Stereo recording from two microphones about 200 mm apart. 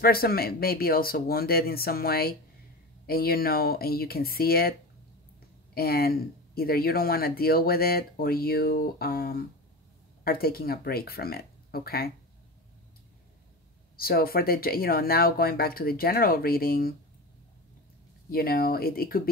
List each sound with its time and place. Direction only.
0.0 s speech: 50° left (ahead or behind)
5.8 s speech: 50° left (ahead or behind)
13.9 s speech: 50° left (ahead or behind)
18.3 s speech: 45° left (ahead or behind)